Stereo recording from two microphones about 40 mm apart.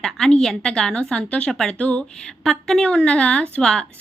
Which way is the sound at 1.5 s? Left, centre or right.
Centre.